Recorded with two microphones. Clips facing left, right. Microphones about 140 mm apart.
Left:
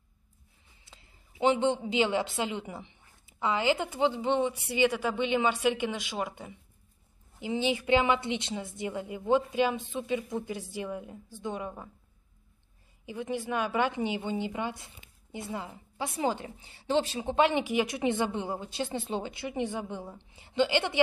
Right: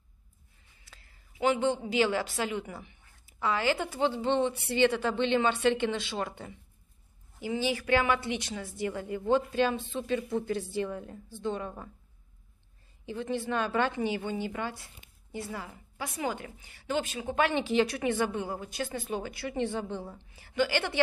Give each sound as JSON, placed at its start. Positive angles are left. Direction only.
{"t": 0.8, "sound": "a sound", "side_deg": 25}
{"t": 1.9, "sound": "a woman's voice", "side_deg": 20}
{"t": 13.0, "sound": "a woman's voice", "side_deg": 10}